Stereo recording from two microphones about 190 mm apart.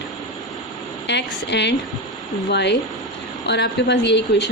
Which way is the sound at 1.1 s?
65° left (ahead or behind).